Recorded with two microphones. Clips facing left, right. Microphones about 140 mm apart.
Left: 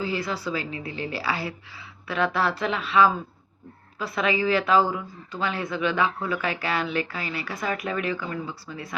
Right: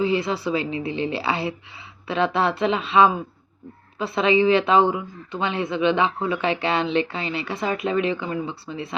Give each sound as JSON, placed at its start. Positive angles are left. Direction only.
{"t": 0.0, "sound": "speech", "side_deg": -25}